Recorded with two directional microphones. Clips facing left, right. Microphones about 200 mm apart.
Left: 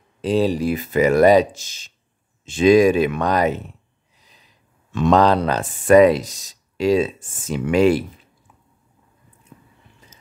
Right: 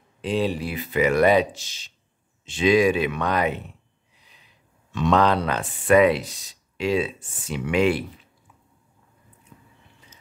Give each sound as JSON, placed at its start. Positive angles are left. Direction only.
{"t": 0.2, "sound": "speech", "side_deg": 40}
{"t": 4.9, "sound": "speech", "side_deg": 45}
{"t": 9.5, "sound": "biting", "side_deg": 45}